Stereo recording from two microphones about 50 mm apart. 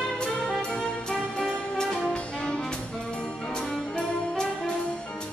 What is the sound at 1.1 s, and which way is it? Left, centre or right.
Music, centre.